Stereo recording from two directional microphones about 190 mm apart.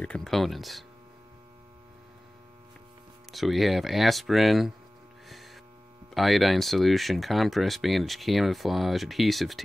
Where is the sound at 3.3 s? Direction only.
Centre (ahead or behind).